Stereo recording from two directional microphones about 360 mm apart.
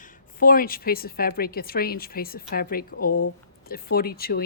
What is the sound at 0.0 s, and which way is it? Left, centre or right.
A woman's voice, left.